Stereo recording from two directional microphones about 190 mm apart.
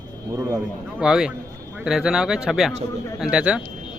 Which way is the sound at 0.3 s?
15° right (ahead or behind).